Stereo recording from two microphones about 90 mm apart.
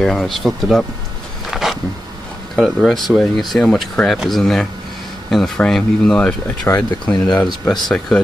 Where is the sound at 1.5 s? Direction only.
Centre (ahead or behind).